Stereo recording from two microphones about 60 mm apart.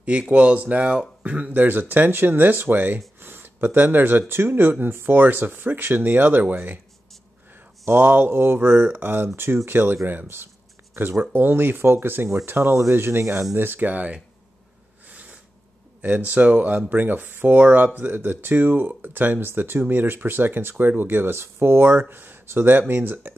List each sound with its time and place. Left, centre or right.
0.0 s speech: right
3.2 s a sound: right
4.3 s speech: right
7.8 s speech: right
13.6 s speech: right
16.0 s speech: right